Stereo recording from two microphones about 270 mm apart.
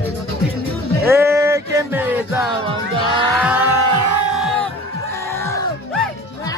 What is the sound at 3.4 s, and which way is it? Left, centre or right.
Speech, centre.